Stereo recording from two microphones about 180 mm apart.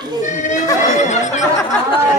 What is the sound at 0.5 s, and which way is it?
Chatter, 20° left (ahead or behind).